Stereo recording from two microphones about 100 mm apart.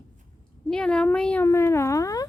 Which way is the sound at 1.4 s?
25° left (ahead or behind).